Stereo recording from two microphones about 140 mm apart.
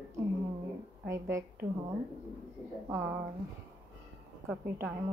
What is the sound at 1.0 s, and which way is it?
Speech, 20° right (ahead or behind).